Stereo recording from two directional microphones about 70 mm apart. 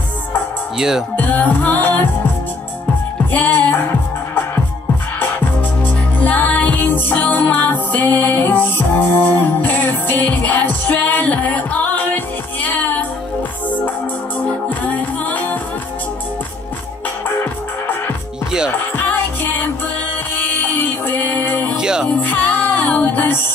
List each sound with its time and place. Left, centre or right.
0.7 s music: centre
1.1 s music: left
3.3 s music: left
6.2 s music: left
14.4 s music: centre
18.9 s music: left
21.7 s music: centre
22.0 s music: left